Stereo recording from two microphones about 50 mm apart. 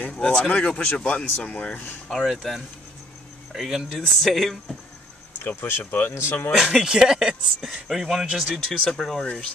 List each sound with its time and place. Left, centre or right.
0.3 s speech: left
2.0 s speech: centre
5.4 s speech: left
6.1 s speech: left
6.8 s speech: centre
8.6 s speech: centre